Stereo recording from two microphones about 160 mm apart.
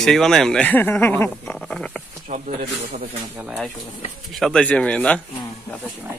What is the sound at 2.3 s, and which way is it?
Speech, 50° right (ahead or behind).